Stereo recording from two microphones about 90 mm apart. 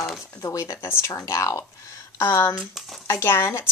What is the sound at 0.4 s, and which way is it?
Speech, 35° left (ahead or behind).